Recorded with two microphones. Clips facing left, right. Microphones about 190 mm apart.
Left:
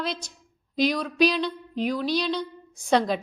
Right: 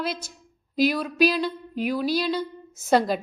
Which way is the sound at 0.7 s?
5° right (ahead or behind).